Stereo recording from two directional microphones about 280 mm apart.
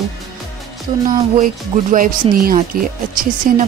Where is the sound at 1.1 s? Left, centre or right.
Right.